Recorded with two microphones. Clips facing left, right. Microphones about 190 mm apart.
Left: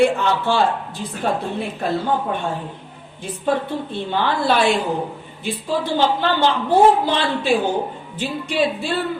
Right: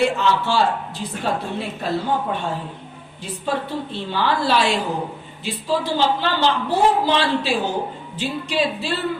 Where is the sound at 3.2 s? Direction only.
55° left (ahead or behind).